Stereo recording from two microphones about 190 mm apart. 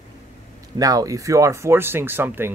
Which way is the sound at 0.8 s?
20° right (ahead or behind).